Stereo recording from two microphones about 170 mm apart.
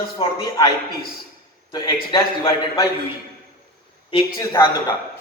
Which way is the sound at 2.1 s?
20° left (ahead or behind).